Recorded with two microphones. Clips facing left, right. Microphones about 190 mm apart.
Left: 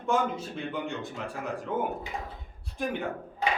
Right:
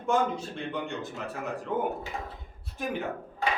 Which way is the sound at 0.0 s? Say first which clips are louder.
Right 1 dB; centre (ahead or behind).